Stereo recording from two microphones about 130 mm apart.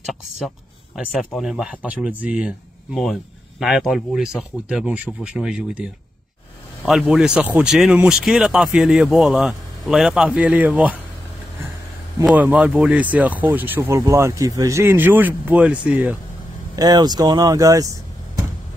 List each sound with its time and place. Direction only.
0.0 s speech: centre (ahead or behind)
6.9 s speech: 5° right (ahead or behind)
12.3 s speech: 10° right (ahead or behind)
16.7 s speech: 30° right (ahead or behind)